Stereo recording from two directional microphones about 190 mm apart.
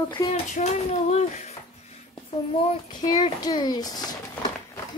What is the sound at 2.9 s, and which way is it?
Speech, 40° left (ahead or behind).